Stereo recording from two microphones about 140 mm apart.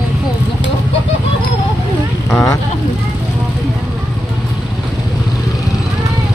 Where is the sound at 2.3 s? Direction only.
25° left (ahead or behind).